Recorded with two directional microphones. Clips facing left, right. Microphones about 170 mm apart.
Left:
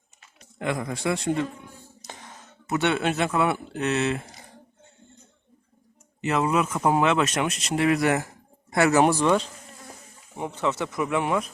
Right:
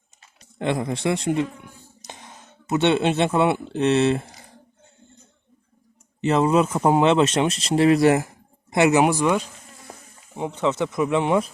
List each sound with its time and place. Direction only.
0.2 s speech: 30° right (ahead or behind)
6.2 s speech: 30° right (ahead or behind)
8.7 s speech: 20° right (ahead or behind)